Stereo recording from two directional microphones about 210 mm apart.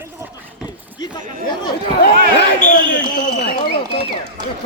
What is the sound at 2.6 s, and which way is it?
Speech, 35° left (ahead or behind).